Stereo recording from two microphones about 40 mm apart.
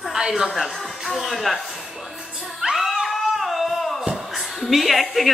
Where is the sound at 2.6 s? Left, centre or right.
Centre.